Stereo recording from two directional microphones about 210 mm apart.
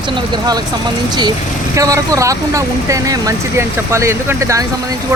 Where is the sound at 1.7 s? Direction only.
15° right (ahead or behind).